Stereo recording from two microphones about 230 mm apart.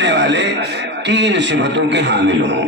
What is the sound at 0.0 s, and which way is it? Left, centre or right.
A man's voice, right.